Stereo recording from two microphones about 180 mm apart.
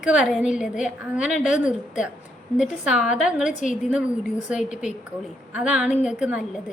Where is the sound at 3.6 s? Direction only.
40° left (ahead or behind).